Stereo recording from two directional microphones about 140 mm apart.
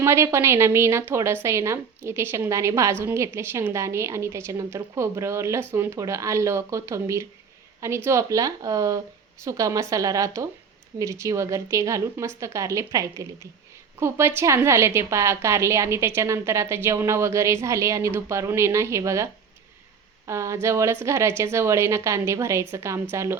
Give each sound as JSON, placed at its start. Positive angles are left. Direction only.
{"t": 0.0, "sound": "a woman's voice", "side_deg": -20}